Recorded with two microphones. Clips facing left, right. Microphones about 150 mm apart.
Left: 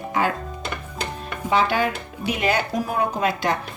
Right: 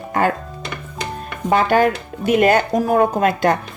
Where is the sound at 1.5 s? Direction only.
50° right (ahead or behind).